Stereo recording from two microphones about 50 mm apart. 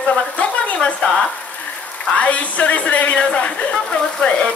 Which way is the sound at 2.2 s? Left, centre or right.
Left.